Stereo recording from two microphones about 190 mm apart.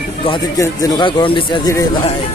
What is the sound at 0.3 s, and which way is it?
Speech, 15° left (ahead or behind).